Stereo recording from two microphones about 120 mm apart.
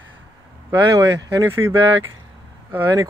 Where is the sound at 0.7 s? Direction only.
30° right (ahead or behind).